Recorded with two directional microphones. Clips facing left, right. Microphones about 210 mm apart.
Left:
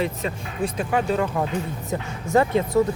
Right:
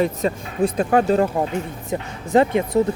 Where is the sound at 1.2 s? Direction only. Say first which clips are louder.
Right 3 dB; 25° right (ahead or behind).